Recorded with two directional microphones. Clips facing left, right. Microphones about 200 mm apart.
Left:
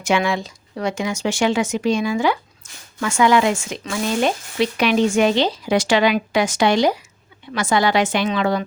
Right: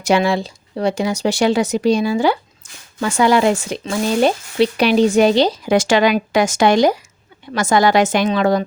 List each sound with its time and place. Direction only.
0.0 s a woman's voice: 35° right (ahead or behind)